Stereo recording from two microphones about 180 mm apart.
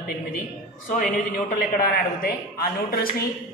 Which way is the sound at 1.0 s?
50° left (ahead or behind).